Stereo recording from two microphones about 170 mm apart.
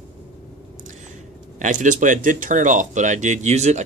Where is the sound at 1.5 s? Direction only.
50° right (ahead or behind).